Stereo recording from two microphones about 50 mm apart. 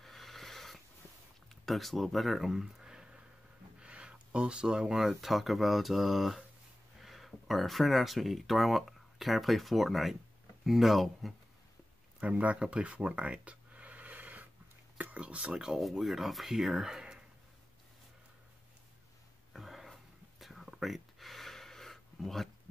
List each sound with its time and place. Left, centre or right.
0.0 s wheeze: centre
1.7 s speech: centre
12.2 s a sound: right
15.5 s speech: centre
19.5 s whispering: centre
20.8 s a sound: centre